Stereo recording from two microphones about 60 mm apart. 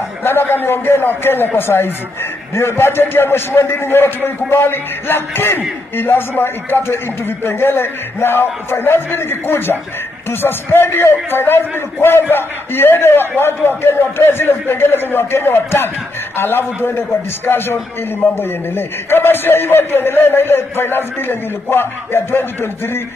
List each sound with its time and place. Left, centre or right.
0.2 s speech: left